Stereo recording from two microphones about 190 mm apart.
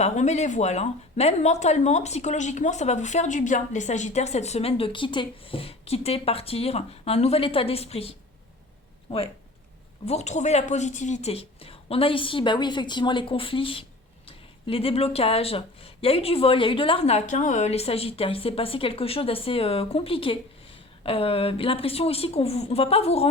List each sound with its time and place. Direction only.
0.0 s speech: 35° left (ahead or behind)
10.1 s speech: 35° left (ahead or behind)